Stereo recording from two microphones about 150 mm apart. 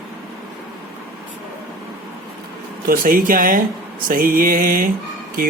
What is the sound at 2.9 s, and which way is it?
Speech, 70° right (ahead or behind).